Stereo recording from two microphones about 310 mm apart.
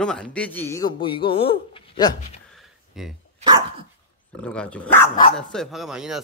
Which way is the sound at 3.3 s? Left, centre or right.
Centre.